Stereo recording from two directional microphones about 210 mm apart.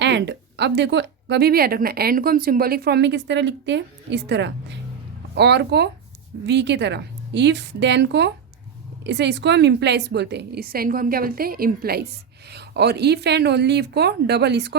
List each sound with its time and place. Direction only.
0.0 s a woman's voice: 55° right (ahead or behind)